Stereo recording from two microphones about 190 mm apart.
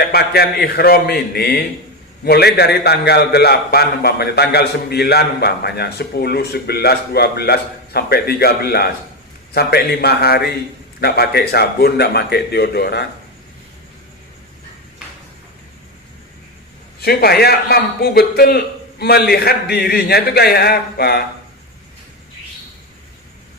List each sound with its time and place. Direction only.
0.1 s a man's voice: 55° left (ahead or behind)
17.0 s a man's voice: 55° left (ahead or behind)